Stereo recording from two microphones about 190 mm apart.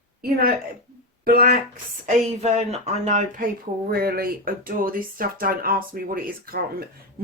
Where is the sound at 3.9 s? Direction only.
55° right (ahead or behind).